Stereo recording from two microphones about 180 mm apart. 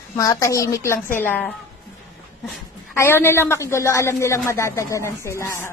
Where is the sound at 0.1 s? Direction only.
15° left (ahead or behind).